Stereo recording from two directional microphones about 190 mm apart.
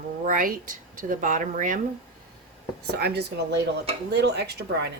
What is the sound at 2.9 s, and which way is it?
Speech, 55° right (ahead or behind).